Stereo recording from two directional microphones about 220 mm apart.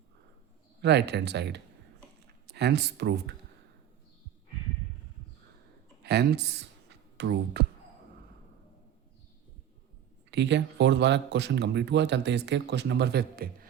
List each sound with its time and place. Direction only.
0.8 s speech: 50° right (ahead or behind)
6.0 s speech: 50° right (ahead or behind)
10.3 s speech: 50° right (ahead or behind)